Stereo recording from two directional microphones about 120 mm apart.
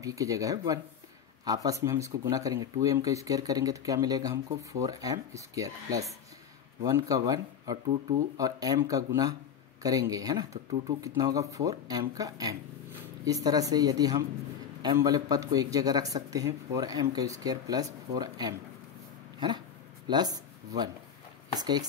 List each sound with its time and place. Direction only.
0.0 s speech: 25° right (ahead or behind)
20.1 s speech: 35° right (ahead or behind)